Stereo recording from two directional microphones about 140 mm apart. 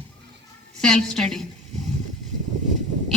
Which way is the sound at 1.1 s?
5° left (ahead or behind).